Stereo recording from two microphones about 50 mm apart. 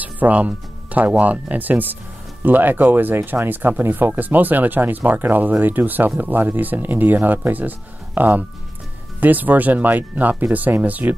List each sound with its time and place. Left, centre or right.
0.0 s speech: right